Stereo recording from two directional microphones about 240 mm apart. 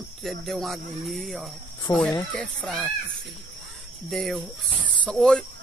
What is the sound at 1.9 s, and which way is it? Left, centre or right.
Speech, centre.